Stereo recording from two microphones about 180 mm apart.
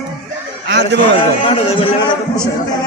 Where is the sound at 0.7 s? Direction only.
75° right (ahead or behind).